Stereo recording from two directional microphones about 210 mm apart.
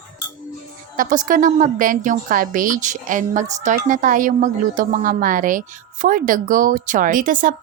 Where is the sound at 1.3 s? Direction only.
40° right (ahead or behind).